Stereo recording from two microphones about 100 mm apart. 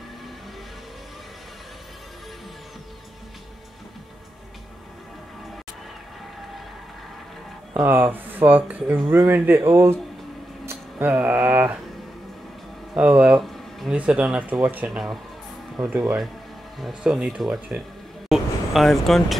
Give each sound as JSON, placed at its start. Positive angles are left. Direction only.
{"t": 7.8, "sound": "speech", "side_deg": -20}
{"t": 12.9, "sound": "speech", "side_deg": -15}
{"t": 13.4, "sound": "a sound", "side_deg": 0}
{"t": 13.9, "sound": "speech", "side_deg": -10}
{"t": 14.9, "sound": "speech", "side_deg": 0}
{"t": 16.8, "sound": "speech", "side_deg": -5}
{"t": 18.3, "sound": "a sound", "side_deg": 0}